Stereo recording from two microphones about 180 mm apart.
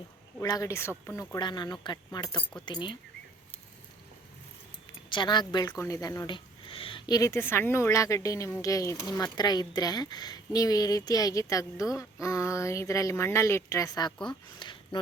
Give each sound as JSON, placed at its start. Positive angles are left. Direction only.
{"t": 0.4, "sound": "speech", "side_deg": 20}
{"t": 1.4, "sound": "speech", "side_deg": 25}
{"t": 5.0, "sound": "speech", "side_deg": 25}